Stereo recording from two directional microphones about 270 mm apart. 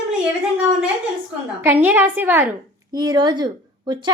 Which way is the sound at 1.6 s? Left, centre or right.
Centre.